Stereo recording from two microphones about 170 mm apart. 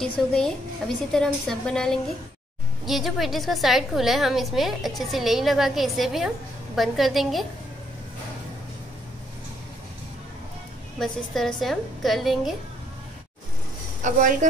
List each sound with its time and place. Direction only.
0.0 s a woman's voice: 5° left (ahead or behind)
11.0 s a woman's voice: centre (ahead or behind)
14.0 s a woman's voice: 50° right (ahead or behind)